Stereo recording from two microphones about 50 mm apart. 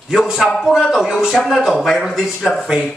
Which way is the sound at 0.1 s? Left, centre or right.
Centre.